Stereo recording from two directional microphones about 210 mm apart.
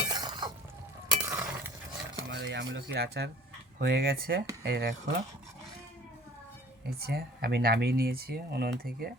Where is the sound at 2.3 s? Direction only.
60° right (ahead or behind).